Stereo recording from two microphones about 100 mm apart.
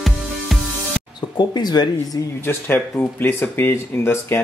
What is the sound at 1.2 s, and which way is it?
Speech, 45° left (ahead or behind).